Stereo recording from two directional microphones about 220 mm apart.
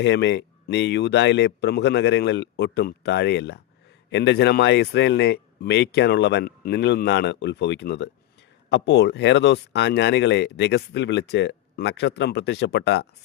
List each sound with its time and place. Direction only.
0.0 s speech: 50° left (ahead or behind)